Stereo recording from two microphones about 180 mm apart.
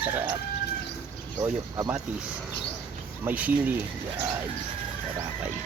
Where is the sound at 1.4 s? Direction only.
20° right (ahead or behind).